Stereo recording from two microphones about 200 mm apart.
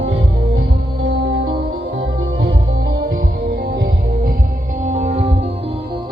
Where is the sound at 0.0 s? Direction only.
70° right (ahead or behind); by 5.8 s 30° right (ahead or behind).